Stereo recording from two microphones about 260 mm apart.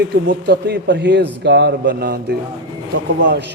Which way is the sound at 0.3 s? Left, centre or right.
Right.